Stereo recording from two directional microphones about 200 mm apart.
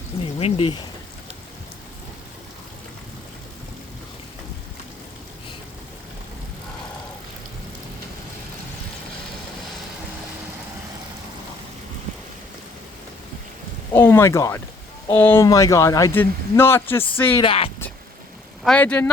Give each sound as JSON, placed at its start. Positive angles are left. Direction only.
{"t": 0.3, "sound": "speech", "side_deg": 30}
{"t": 13.9, "sound": "speech", "side_deg": 10}
{"t": 17.4, "sound": "speech", "side_deg": 30}
{"t": 18.6, "sound": "speech", "side_deg": 5}